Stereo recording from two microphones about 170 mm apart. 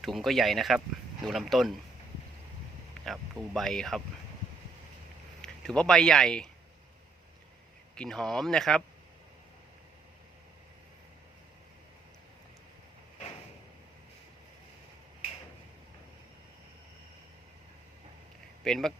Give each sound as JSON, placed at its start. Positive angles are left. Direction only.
{"t": 0.0, "sound": "speech", "side_deg": 0}
{"t": 3.0, "sound": "speech", "side_deg": 0}
{"t": 5.4, "sound": "speech", "side_deg": 5}
{"t": 7.9, "sound": "speech", "side_deg": 5}
{"t": 18.6, "sound": "speech", "side_deg": 5}